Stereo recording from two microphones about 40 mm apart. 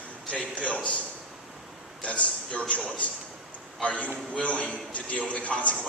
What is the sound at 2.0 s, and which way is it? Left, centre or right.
Speech, left.